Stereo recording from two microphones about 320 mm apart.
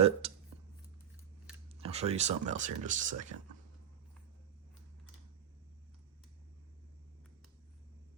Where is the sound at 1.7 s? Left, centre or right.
Centre.